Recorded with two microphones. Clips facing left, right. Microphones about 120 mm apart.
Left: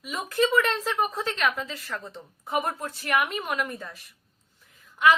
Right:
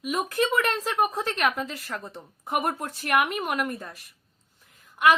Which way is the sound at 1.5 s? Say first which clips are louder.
Right 2 dB; 45° right (ahead or behind).